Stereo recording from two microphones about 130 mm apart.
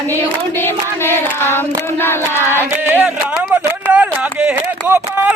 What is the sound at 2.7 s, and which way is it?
Speech, 15° right (ahead or behind).